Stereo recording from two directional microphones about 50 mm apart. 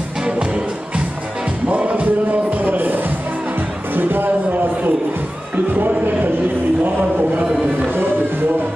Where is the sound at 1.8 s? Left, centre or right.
Right.